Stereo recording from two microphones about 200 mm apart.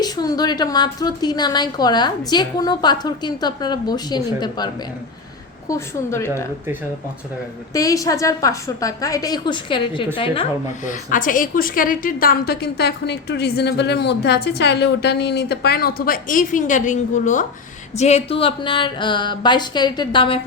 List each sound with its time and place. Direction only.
0.0 s a woman's voice: 20° left (ahead or behind)
7.7 s a woman's voice: 15° left (ahead or behind)
10.8 s a woman's voice: 40° left (ahead or behind); by 20.4 s 25° left (ahead or behind)